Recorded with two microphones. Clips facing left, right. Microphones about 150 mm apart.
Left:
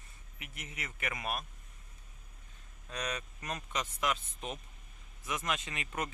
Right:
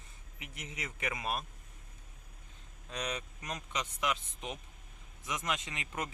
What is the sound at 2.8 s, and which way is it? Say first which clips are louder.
Speech: even; 20° right (ahead or behind).